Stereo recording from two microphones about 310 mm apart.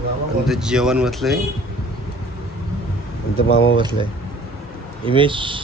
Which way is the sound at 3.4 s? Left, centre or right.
Left.